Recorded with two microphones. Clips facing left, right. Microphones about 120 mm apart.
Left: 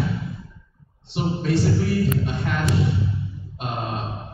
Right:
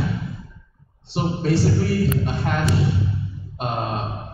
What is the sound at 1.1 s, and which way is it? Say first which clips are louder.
A man's voice: right 1 dB; 35° right (ahead or behind).